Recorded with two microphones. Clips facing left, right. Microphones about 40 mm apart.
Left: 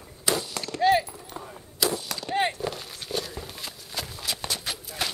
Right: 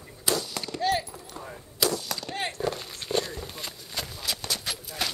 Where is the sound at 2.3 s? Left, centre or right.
Centre.